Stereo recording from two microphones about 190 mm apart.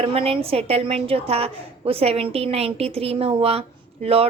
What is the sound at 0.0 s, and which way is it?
A woman's voice, 30° right (ahead or behind).